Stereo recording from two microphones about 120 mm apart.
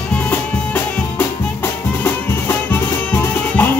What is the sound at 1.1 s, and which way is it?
Music, 15° left (ahead or behind).